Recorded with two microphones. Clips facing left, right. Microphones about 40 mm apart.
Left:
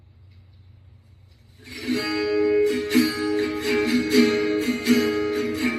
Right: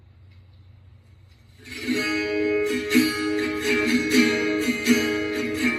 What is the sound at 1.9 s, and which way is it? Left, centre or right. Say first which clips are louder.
Music: left 1 dB; right.